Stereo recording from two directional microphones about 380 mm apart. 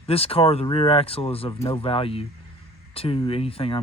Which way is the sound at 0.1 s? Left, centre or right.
Centre.